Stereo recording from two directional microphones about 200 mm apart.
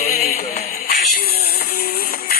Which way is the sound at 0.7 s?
45° left (ahead or behind).